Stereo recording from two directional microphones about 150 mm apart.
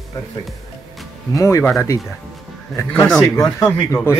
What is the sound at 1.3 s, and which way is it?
Speech, 20° left (ahead or behind).